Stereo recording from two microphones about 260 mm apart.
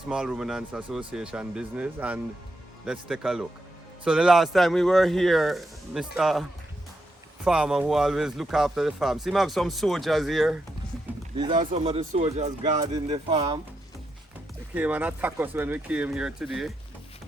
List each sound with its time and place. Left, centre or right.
0.1 s speech: centre
7.4 s speech: centre
11.3 s speech: centre
14.8 s speech: centre